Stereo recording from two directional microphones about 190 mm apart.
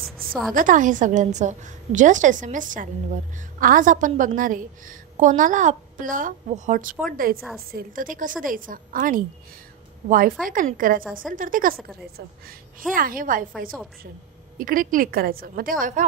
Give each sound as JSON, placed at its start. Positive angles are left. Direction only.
{"t": 0.0, "sound": "a sound", "side_deg": 0}
{"t": 0.6, "sound": "a woman's voice", "side_deg": -45}
{"t": 14.6, "sound": "a woman's voice", "side_deg": -45}